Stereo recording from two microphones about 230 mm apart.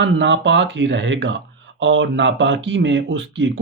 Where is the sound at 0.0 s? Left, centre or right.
Right.